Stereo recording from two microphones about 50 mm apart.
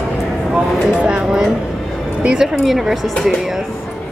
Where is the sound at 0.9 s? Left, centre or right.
Centre.